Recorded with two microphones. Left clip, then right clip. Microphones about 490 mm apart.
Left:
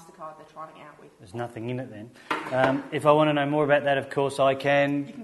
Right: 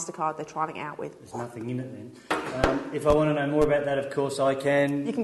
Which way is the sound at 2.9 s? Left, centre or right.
Left.